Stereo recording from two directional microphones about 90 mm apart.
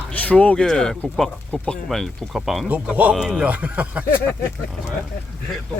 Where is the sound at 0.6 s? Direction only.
5° left (ahead or behind).